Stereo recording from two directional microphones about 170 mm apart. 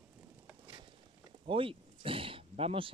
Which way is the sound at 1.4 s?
30° right (ahead or behind).